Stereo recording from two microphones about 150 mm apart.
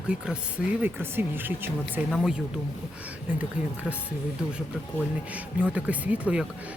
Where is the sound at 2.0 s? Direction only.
Centre (ahead or behind).